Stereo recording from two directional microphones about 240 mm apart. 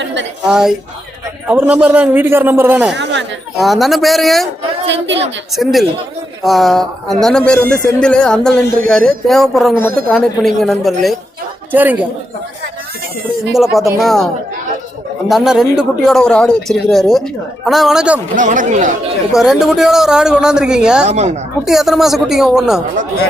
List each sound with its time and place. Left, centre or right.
0.0 s speech: right
0.4 s a man's voice: centre
2.9 s speech: right
3.6 s speech: centre
4.9 s speech: right
5.6 s a man's voice: centre
13.5 s speech: centre
15.3 s speech: centre
18.3 s speech: right
19.4 s speech: centre
21.1 s speech: right
21.6 s speech: centre